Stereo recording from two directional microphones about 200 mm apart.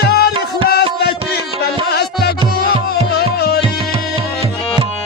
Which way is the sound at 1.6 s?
55° left (ahead or behind).